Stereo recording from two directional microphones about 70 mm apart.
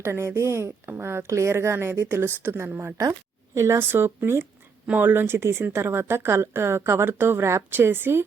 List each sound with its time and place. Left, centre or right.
0.0 s speech: right
3.0 s speech: right